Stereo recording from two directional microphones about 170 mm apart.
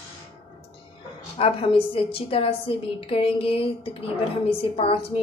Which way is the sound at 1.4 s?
35° left (ahead or behind).